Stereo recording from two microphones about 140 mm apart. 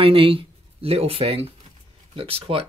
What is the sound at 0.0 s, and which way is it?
Speech, 40° right (ahead or behind).